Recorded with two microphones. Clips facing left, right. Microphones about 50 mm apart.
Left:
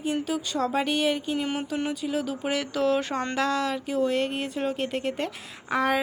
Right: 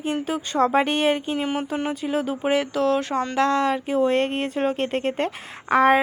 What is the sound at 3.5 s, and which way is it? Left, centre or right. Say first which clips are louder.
Speech: right 5 dB; right.